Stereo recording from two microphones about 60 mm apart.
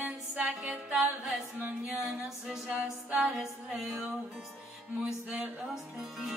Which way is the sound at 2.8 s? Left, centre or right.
Right.